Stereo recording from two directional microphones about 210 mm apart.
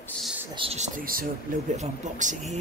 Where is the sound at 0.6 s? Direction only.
30° right (ahead or behind).